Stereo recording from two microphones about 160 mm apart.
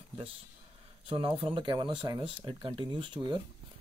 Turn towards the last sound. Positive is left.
turn(degrees=-30)  # may be behind; listen again after turning